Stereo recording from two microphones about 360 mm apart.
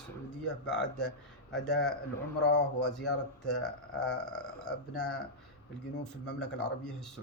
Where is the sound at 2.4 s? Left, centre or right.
Left.